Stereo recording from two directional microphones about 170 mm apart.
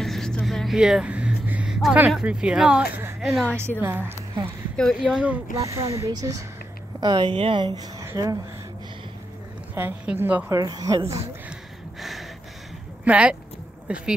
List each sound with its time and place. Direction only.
0.0 s vehicle: centre (ahead or behind)
3.8 s a woman's voice: 15° right (ahead or behind)
4.7 s speech: centre (ahead or behind)
5.5 s a woman's voice: 20° right (ahead or behind)
9.8 s a woman's voice: 10° right (ahead or behind)
12.0 s a sound: centre (ahead or behind)
13.0 s a woman's voice: 5° right (ahead or behind)